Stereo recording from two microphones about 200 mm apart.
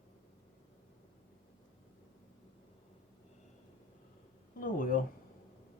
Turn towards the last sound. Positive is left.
turn(degrees=45)  # may be behind; listen again after turning